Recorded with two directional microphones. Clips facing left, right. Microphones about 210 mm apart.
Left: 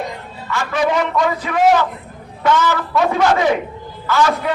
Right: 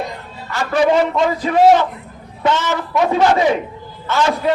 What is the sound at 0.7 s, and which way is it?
A man's voice, 30° right (ahead or behind).